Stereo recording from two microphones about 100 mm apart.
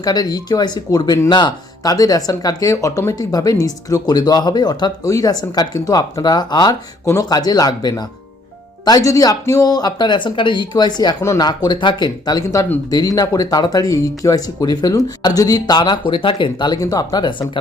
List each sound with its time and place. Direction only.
0.0 s speech: 40° left (ahead or behind)
11.2 s speech: 30° left (ahead or behind)
11.4 s speech: 45° left (ahead or behind)